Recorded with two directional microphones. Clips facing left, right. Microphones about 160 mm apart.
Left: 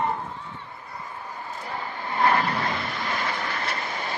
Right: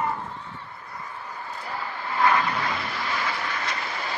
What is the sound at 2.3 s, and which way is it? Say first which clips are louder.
Vehicle: even; 50° left (ahead or behind).